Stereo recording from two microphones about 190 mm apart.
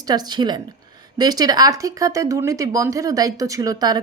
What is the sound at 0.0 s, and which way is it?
A woman's voice, 20° right (ahead or behind).